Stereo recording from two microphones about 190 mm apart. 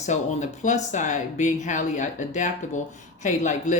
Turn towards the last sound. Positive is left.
turn(degrees=40)  # may be behind; listen again after turning